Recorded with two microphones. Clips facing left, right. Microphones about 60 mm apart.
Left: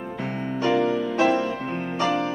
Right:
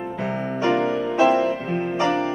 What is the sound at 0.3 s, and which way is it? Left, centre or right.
Music, right.